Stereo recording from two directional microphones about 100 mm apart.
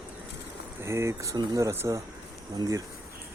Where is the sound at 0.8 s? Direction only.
30° right (ahead or behind).